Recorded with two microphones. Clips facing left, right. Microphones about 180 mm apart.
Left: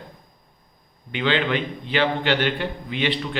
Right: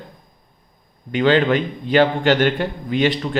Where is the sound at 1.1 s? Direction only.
45° right (ahead or behind).